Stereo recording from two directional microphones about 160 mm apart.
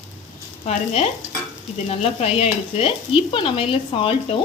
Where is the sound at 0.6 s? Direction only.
40° left (ahead or behind).